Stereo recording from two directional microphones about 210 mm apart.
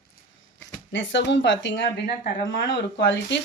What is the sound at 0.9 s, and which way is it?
Speech, 60° left (ahead or behind).